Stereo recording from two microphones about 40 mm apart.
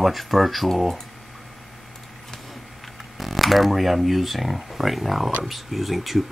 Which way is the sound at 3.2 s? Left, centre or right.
Centre.